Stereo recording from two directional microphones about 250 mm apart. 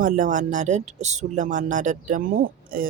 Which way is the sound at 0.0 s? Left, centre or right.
Right.